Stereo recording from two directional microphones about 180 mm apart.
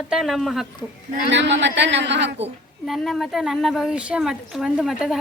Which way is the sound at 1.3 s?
80° right.